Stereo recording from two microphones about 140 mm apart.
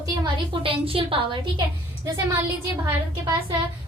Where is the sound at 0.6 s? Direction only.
40° right (ahead or behind).